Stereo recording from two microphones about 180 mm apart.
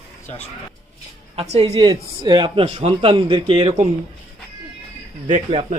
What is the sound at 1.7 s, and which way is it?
A man's voice, 25° right (ahead or behind).